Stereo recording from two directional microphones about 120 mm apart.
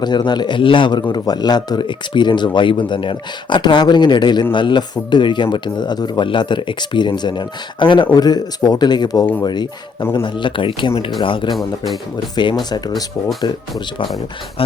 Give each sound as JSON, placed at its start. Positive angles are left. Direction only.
{"t": 0.0, "sound": "speech", "side_deg": 35}